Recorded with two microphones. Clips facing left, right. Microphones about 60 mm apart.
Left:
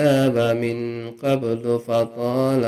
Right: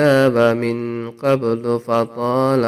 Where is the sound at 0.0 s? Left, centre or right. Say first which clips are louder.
Right 4 dB; right.